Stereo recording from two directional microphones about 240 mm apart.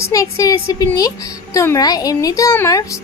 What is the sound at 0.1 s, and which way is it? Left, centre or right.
A woman's voice, centre.